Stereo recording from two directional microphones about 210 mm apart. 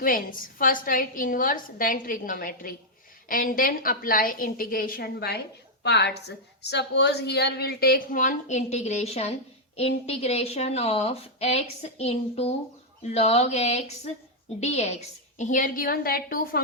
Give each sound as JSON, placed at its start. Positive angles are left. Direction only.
{"t": 0.0, "sound": "a woman's voice", "side_deg": 40}